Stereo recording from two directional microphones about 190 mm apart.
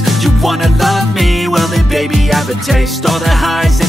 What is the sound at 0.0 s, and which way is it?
Music, centre (ahead or behind).